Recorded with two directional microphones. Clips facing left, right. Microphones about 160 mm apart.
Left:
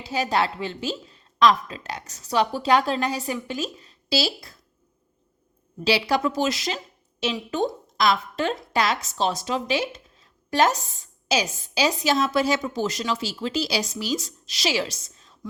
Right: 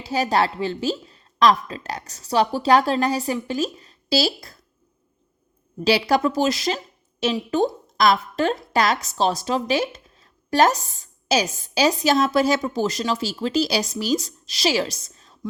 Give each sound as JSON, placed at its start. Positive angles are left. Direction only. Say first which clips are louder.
{"t": 0.0, "sound": "a woman's voice", "louder": "right 3 dB", "side_deg": -40}
{"t": 5.8, "sound": "a woman's voice", "louder": "right 3 dB", "side_deg": -45}